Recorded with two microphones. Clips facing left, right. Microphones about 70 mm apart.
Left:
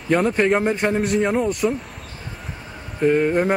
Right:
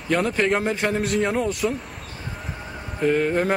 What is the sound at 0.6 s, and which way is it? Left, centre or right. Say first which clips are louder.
Speech: left 3 dB; centre.